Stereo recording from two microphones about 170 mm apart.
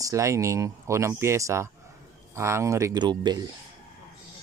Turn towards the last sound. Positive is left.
turn(degrees=-25)  # may be behind; listen again after turning